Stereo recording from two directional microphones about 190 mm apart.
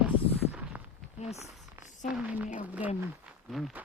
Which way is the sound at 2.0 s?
5° right (ahead or behind).